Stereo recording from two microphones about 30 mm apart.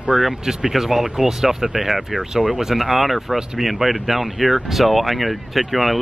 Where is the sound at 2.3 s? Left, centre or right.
Right.